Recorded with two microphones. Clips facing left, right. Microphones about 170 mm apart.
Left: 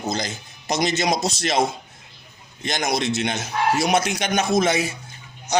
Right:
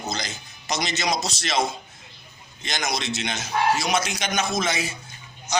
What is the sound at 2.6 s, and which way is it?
A man's voice, 55° left (ahead or behind).